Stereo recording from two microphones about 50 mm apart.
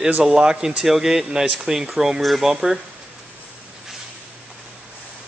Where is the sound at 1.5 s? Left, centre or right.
Centre.